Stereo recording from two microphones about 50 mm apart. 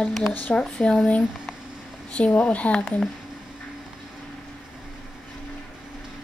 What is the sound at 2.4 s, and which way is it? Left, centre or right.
Speech, left.